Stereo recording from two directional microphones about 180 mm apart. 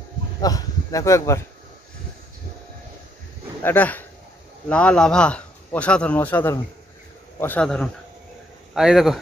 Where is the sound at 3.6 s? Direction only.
10° left (ahead or behind).